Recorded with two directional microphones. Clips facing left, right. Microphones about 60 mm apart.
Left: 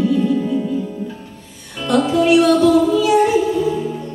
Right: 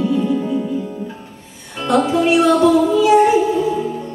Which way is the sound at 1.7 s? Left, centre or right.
Right.